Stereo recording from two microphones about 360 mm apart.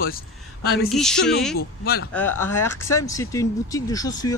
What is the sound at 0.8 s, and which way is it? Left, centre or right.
Speech, centre.